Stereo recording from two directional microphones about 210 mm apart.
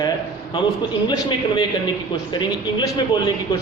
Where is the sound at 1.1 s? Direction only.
20° left (ahead or behind).